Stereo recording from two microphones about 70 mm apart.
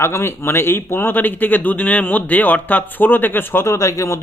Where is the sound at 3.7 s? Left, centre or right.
Left.